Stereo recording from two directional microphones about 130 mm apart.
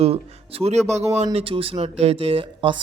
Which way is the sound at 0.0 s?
50° right (ahead or behind).